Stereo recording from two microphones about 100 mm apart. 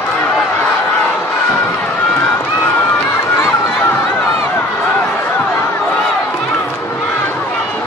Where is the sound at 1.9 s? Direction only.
15° left (ahead or behind).